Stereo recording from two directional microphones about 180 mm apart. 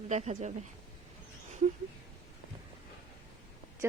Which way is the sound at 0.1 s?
40° right (ahead or behind).